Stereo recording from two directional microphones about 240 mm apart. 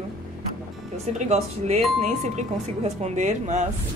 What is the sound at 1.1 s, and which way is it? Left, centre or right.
A woman's voice, right.